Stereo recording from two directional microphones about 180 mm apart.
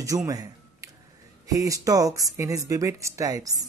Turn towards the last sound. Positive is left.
turn(degrees=-20)  # may be behind; listen again after turning